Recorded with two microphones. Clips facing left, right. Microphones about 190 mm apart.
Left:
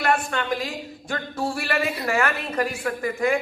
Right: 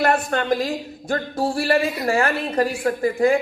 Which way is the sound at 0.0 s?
40° right (ahead or behind).